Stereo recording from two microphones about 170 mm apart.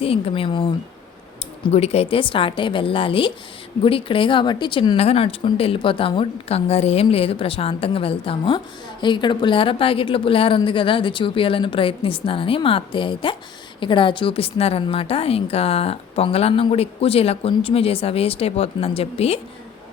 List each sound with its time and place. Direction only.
0.0 s speech: 35° left (ahead or behind)
1.7 s speech: 35° left (ahead or behind)